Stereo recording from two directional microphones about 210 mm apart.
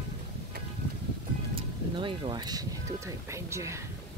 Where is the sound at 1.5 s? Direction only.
25° right (ahead or behind).